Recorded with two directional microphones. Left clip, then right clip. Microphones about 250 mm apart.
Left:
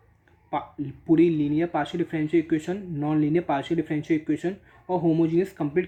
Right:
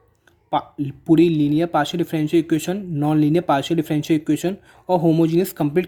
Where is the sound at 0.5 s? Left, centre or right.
Right.